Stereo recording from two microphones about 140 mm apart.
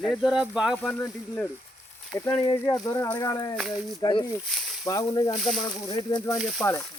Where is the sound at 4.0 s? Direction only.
30° left (ahead or behind).